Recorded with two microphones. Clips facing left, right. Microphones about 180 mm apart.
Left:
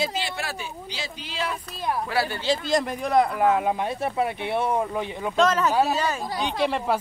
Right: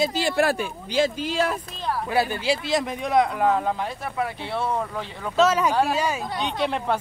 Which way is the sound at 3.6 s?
20° left (ahead or behind).